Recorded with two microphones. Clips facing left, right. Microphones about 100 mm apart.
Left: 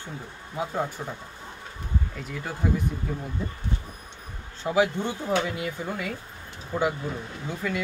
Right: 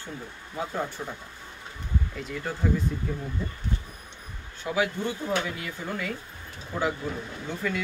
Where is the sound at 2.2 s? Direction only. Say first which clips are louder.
Right 1 dB; centre (ahead or behind).